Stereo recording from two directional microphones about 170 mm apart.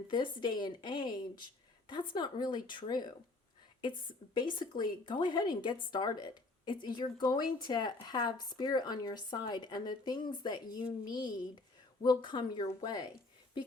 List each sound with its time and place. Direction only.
0.1 s speech: 25° left (ahead or behind)